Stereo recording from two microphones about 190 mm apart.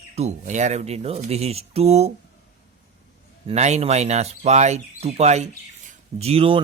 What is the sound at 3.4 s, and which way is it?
Speech, 35° right (ahead or behind).